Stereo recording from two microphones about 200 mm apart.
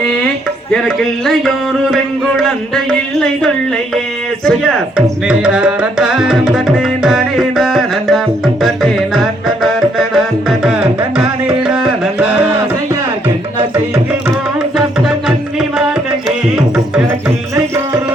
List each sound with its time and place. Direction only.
0.7 s speech: centre (ahead or behind)
8.6 s music: centre (ahead or behind)
13.6 s music: 15° right (ahead or behind)
14.8 s music: centre (ahead or behind)
16.6 s music: 5° right (ahead or behind)